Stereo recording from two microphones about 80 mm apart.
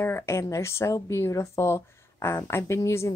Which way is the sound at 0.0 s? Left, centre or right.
Left.